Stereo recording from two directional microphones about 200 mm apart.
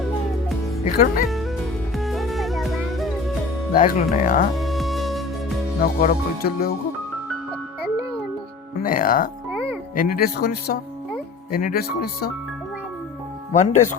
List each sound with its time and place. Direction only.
0.9 s speech: 45° left (ahead or behind)
2.0 s music: centre (ahead or behind)
3.8 s speech: 40° left (ahead or behind)
4.5 s music: centre (ahead or behind)
5.8 s speech: 45° left (ahead or behind)
8.8 s speech: 45° left (ahead or behind)
13.5 s speech: 40° left (ahead or behind)